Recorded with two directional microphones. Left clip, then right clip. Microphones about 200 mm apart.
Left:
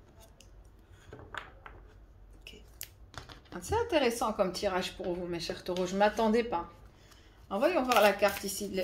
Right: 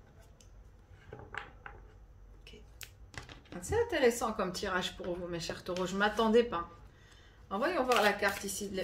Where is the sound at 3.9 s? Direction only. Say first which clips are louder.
Left 1 dB; 20° left (ahead or behind).